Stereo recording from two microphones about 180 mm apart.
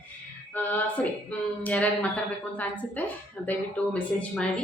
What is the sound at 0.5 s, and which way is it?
Speech, 10° left (ahead or behind).